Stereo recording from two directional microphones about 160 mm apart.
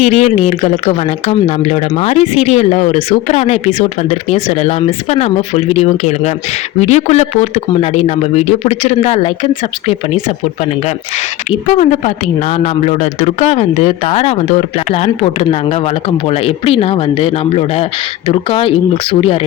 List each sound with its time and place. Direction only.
0.0 s speech: 40° left (ahead or behind)
11.7 s speech: 40° left (ahead or behind)